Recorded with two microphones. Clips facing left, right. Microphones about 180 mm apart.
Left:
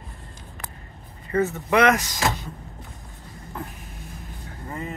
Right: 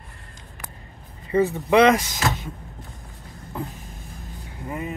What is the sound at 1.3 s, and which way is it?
Speech, 15° right (ahead or behind).